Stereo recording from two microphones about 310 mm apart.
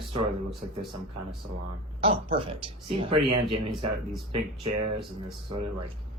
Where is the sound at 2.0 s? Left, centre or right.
Centre.